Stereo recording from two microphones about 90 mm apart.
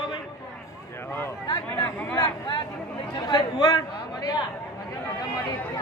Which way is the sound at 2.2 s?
60° left (ahead or behind).